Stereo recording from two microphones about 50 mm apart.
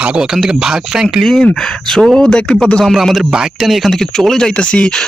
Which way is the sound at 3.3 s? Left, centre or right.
Centre.